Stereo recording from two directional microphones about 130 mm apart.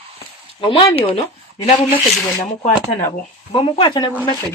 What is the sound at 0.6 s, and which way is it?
Speech, 45° left (ahead or behind).